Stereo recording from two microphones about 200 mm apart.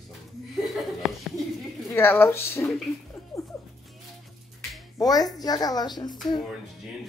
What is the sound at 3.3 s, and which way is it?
Music, 15° left (ahead or behind).